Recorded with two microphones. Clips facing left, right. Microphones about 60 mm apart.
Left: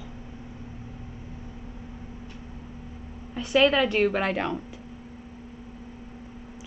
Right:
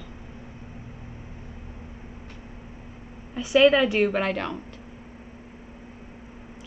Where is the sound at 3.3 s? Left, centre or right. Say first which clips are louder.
Right 3 dB; centre.